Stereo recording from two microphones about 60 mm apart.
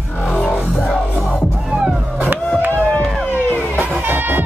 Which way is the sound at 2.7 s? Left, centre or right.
Left.